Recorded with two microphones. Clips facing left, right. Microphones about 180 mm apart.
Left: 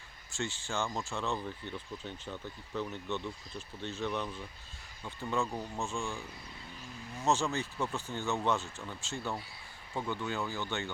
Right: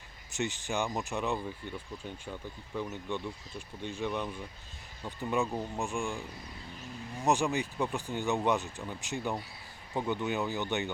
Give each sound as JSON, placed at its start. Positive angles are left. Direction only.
{"t": 0.3, "sound": "speech", "side_deg": -20}